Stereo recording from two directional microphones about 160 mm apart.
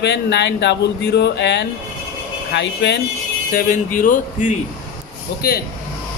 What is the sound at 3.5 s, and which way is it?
Speech, 60° left (ahead or behind).